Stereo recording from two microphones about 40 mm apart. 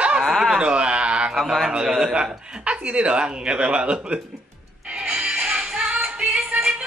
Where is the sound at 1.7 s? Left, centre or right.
Centre.